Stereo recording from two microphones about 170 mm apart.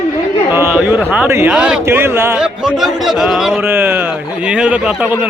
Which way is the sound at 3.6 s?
15° right (ahead or behind).